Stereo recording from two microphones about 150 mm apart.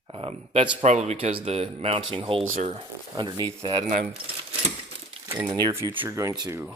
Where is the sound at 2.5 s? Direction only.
60° right (ahead or behind).